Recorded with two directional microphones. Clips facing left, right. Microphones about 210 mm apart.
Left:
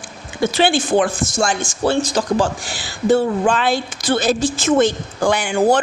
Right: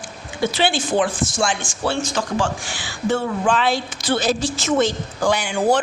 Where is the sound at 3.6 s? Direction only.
50° left (ahead or behind).